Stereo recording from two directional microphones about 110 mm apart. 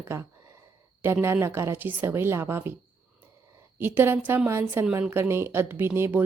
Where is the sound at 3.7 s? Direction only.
20° right (ahead or behind).